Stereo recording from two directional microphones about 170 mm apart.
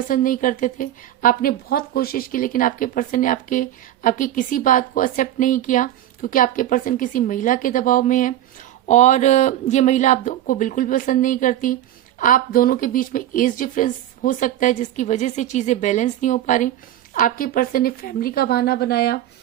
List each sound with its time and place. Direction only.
0.1 s a woman's voice: 55° left (ahead or behind); by 19.1 s 70° left (ahead or behind)